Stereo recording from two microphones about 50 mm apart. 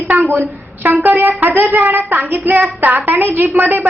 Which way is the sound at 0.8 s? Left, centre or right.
Right.